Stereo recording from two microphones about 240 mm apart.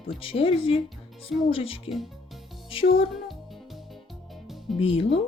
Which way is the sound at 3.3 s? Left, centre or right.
Centre.